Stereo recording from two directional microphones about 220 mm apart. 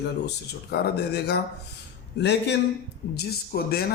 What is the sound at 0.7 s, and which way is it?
Speech, 45° left (ahead or behind).